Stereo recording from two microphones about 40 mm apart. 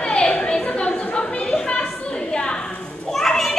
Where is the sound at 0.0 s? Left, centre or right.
Left.